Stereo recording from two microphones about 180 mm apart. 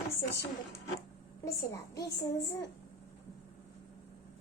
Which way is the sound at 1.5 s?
15° left (ahead or behind).